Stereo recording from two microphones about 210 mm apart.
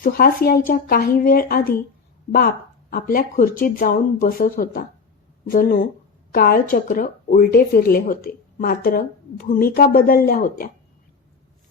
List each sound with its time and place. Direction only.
0.0 s speech: 45° left (ahead or behind)
2.9 s speech: 45° left (ahead or behind)